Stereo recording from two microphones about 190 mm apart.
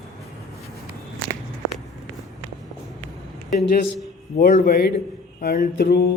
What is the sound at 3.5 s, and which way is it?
A man's voice, 50° left (ahead or behind).